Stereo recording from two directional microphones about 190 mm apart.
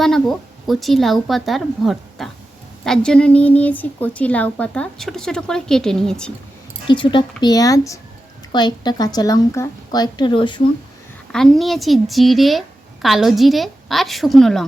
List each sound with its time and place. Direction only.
0.0 s a woman's voice: centre (ahead or behind)
6.8 s speech: 25° left (ahead or behind)
11.3 s a woman's voice: 5° left (ahead or behind)